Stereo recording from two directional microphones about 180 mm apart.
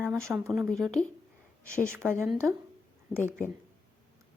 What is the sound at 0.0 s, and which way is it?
Speech, 15° right (ahead or behind).